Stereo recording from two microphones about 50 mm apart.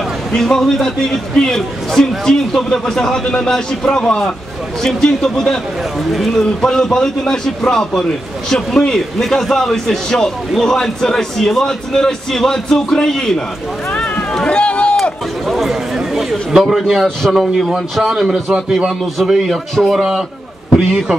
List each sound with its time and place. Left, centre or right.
0.3 s a man's voice: centre
6.1 s a man's voice: centre
6.7 s a man's voice: centre
13.9 s a sound: left
14.3 s run: centre
15.4 s a man's voice: centre